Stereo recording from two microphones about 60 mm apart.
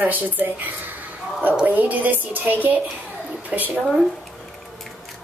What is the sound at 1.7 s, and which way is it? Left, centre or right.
A woman's voice, right.